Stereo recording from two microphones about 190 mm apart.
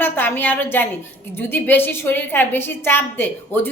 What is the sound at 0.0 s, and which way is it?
A woman's voice, 10° left (ahead or behind).